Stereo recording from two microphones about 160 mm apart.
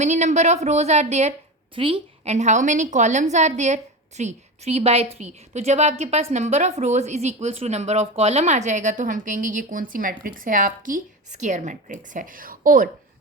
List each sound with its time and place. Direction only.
0.0 s a woman's voice: 45° right (ahead or behind)
1.7 s a woman's voice: 35° right (ahead or behind); by 12.9 s 55° right (ahead or behind)